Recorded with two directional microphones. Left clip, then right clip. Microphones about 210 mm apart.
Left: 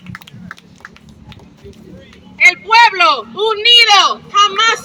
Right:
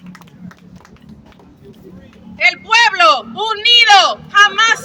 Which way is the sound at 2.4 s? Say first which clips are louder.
Left 3 dB; 25° right (ahead or behind).